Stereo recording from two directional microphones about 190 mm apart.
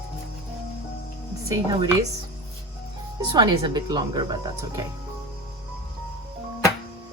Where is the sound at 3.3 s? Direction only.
20° right (ahead or behind).